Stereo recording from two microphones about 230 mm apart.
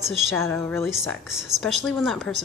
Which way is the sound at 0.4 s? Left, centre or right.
Centre.